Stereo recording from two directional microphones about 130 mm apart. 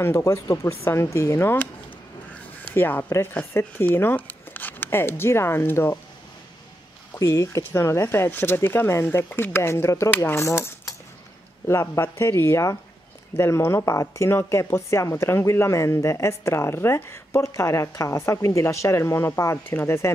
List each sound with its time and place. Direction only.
0.0 s speech: 25° left (ahead or behind)
7.2 s speech: 25° left (ahead or behind)